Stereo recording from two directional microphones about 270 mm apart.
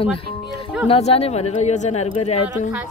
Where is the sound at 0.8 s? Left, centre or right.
Left.